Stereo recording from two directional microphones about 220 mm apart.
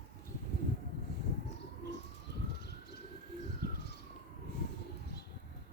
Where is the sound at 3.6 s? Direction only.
45° left (ahead or behind).